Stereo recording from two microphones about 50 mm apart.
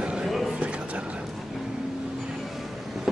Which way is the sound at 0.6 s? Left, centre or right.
Right.